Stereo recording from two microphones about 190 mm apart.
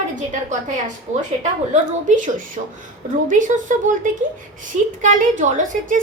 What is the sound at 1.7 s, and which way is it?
A woman's voice, 45° right (ahead or behind).